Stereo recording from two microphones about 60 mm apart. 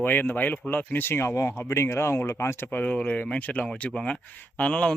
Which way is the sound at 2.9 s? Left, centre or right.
Centre.